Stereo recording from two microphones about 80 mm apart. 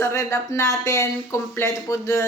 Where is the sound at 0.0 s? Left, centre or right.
Left.